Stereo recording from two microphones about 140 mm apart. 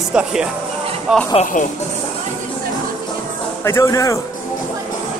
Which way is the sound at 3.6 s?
20° left (ahead or behind).